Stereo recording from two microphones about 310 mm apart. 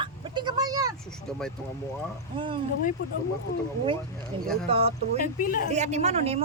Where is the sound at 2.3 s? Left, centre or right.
Centre.